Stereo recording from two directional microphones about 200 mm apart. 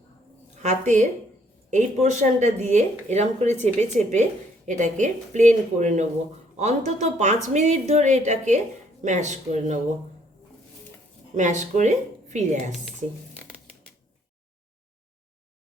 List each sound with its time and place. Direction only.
0.6 s speech: 35° right (ahead or behind)
11.3 s speech: 35° right (ahead or behind)